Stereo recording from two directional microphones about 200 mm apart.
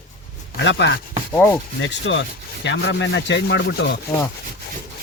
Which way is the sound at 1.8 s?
65° left (ahead or behind).